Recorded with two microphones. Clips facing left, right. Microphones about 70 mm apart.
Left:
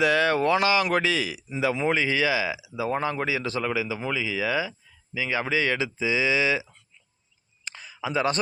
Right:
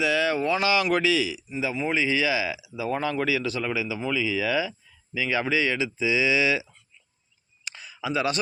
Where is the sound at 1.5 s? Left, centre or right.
Left.